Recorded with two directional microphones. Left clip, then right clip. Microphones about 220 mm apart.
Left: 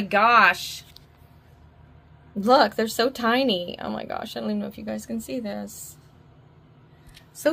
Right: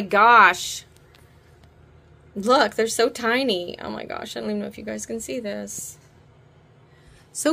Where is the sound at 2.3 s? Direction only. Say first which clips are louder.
Even; 5° left (ahead or behind).